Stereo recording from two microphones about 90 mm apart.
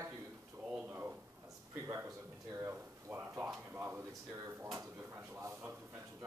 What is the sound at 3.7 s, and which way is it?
Drawer open or close, 25° right (ahead or behind).